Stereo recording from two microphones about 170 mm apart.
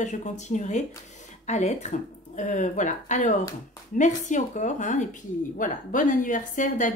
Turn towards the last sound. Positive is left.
turn(degrees=50)  # may be behind; listen again after turning